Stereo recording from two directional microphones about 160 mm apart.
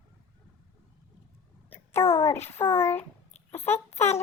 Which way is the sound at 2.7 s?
15° left (ahead or behind).